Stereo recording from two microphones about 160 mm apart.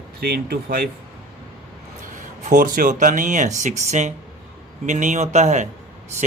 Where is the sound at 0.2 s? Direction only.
75° right (ahead or behind).